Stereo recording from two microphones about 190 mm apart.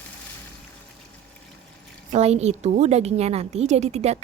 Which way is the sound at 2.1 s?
35° right (ahead or behind).